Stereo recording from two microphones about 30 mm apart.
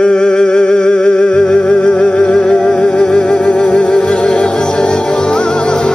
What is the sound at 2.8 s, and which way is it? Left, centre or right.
Music, left.